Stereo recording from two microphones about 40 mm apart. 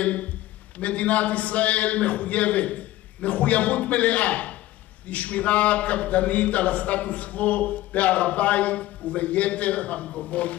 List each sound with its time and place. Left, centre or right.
0.0 s speech: left